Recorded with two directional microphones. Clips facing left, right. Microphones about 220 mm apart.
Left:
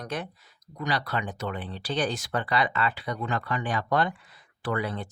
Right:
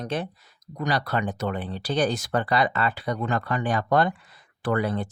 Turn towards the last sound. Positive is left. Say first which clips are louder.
# right 5 dB
turn(degrees=-45)  # may be behind; listen again after turning